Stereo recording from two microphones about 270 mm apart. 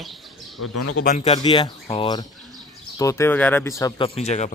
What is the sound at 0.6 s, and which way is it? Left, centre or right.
Speech, left.